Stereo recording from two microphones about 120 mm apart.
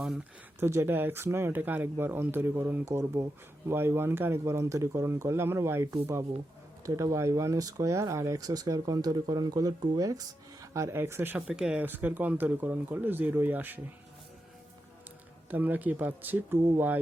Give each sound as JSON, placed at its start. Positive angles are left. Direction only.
{"t": 0.6, "sound": "speech", "side_deg": -20}
{"t": 15.4, "sound": "speech", "side_deg": -15}